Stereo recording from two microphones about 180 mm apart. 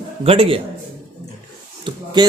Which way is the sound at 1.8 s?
25° right (ahead or behind).